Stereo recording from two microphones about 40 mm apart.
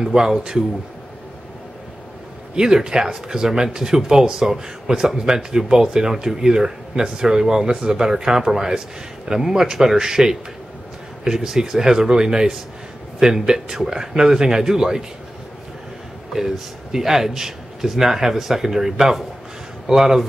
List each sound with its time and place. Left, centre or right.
0.0 s speech: centre
2.5 s speech: centre
16.3 s speech: centre